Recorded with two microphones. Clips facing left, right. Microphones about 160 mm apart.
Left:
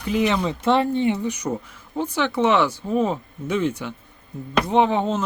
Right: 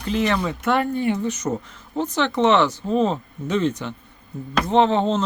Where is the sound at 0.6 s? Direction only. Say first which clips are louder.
Left 4 dB; 25° left (ahead or behind).